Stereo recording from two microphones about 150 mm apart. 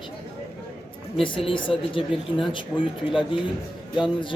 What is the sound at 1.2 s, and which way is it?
Speech, 35° left (ahead or behind).